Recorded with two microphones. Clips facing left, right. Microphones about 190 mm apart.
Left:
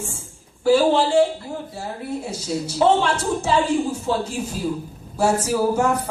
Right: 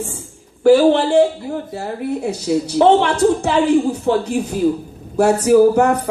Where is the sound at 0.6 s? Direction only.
60° right (ahead or behind).